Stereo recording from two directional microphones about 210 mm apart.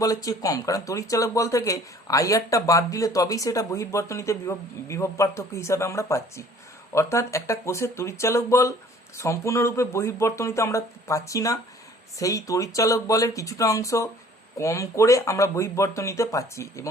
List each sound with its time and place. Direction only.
0.0 s speech: 15° left (ahead or behind)